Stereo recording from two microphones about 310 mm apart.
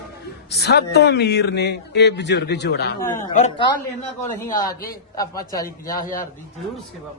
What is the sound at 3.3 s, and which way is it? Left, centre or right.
A woman's voice, centre.